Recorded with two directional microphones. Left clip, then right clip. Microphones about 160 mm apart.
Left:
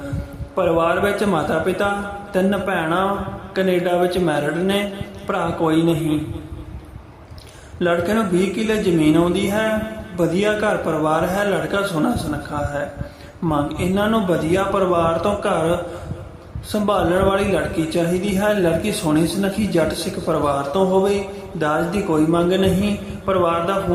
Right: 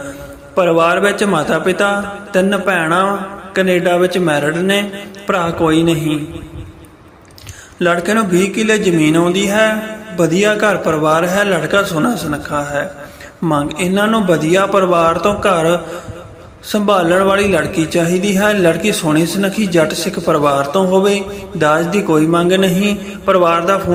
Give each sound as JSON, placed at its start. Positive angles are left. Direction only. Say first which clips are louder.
{"t": 0.5, "sound": "a man's voice", "louder": "right 6 dB", "side_deg": -15}
{"t": 7.8, "sound": "a man's voice", "louder": "right 5 dB", "side_deg": -15}